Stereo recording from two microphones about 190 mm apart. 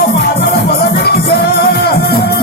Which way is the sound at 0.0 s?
55° left (ahead or behind).